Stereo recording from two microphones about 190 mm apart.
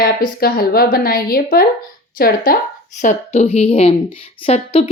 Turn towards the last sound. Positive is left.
turn(degrees=30)  # may be behind; listen again after turning